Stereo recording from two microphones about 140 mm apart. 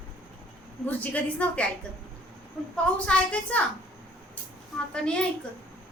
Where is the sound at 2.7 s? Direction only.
10° left (ahead or behind).